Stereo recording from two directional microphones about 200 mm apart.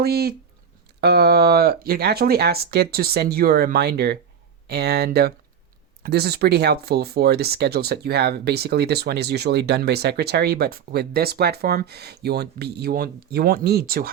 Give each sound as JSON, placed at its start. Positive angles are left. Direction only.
{"t": 0.0, "sound": "speech", "side_deg": -50}